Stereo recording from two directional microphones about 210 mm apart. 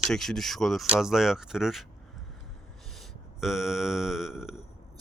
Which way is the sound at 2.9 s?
Centre (ahead or behind).